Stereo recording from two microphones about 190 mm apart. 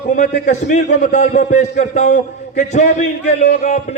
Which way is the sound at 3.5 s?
40° left (ahead or behind).